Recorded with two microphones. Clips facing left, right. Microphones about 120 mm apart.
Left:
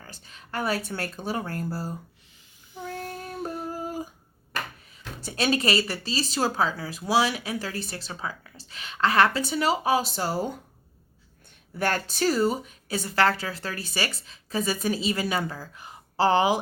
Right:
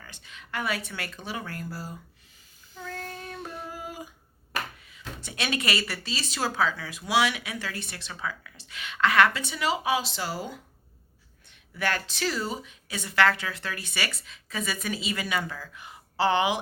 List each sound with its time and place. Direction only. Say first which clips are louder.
0.0 s speech: left 1 dB; 40° left (ahead or behind)
2.7 s child singing: left 3 dB; 15° left (ahead or behind)
3.6 s a sound: left 6 dB; 40° left (ahead or behind)
5.2 s speech: left 6 dB; 35° left (ahead or behind)
11.8 s speech: left 4 dB; 45° left (ahead or behind)